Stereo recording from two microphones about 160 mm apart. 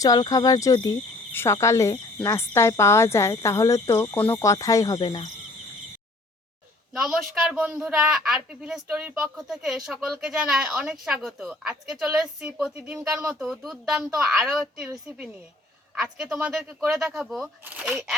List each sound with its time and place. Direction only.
0.0 s cricket: 25° left (ahead or behind)
2.2 s speech: 15° left (ahead or behind)
6.9 s speech: 5° right (ahead or behind)
16.0 s speech: 5° right (ahead or behind)